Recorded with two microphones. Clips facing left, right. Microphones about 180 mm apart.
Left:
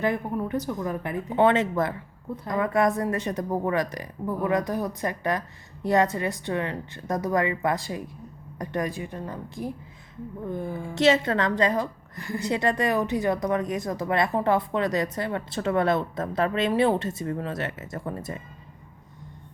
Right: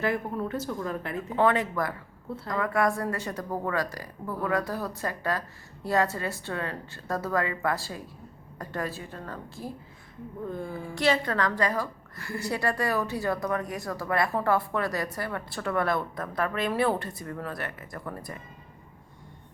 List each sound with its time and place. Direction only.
0.0 s a woman's voice: 15° left (ahead or behind)